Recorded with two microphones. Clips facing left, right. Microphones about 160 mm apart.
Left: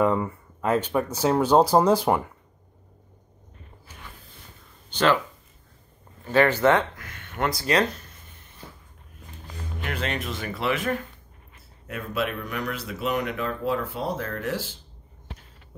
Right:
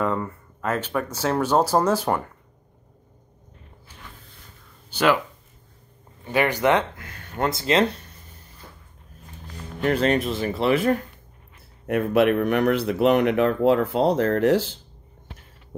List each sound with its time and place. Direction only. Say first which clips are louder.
0.0 s speech: left 3 dB; 15° left (ahead or behind)
4.8 s speech: right 1 dB; 10° right (ahead or behind)
6.2 s speech: left 1 dB; 15° right (ahead or behind)
7.0 s a sound: right 2 dB; 30° right (ahead or behind)
9.8 s speech: right 10 dB; 40° right (ahead or behind)
11.9 s speech: right 10 dB; 65° right (ahead or behind)